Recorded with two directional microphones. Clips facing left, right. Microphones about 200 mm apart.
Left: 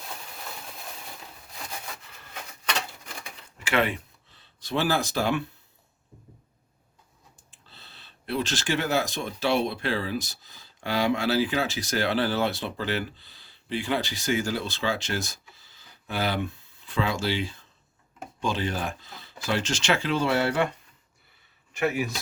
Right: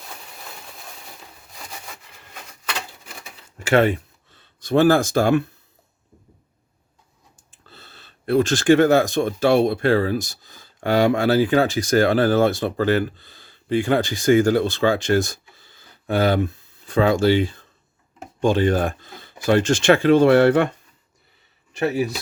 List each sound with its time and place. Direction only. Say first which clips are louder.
3.6 s speech: right 8 dB; 45° right (ahead or behind)
7.7 s speech: right 6 dB; 45° right (ahead or behind)
21.8 s speech: right 5 dB; 35° right (ahead or behind)